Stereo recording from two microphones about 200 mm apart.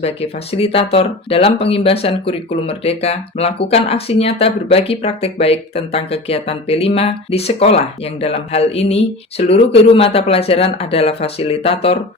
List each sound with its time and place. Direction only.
0.0 s speech: 30° left (ahead or behind)